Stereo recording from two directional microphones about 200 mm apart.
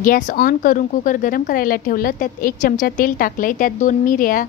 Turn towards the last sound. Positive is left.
turn(degrees=45)  # may be behind; listen again after turning